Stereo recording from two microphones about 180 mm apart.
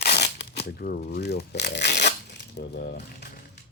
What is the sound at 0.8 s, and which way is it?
Speech, 60° left (ahead or behind).